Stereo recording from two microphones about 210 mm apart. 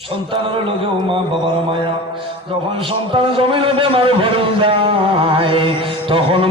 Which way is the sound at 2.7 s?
25° right (ahead or behind).